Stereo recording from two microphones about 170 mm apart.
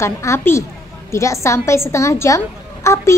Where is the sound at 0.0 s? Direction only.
15° left (ahead or behind).